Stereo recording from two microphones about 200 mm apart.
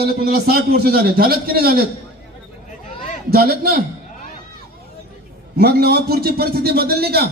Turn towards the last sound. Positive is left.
turn(degrees=-50)  # may be behind; listen again after turning